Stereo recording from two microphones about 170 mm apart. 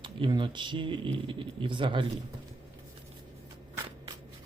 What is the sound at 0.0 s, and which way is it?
Speech, 30° right (ahead or behind).